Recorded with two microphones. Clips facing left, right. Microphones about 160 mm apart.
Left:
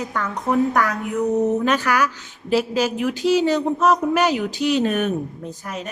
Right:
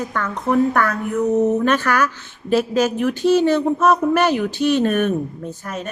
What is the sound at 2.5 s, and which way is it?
Speech, 50° right (ahead or behind).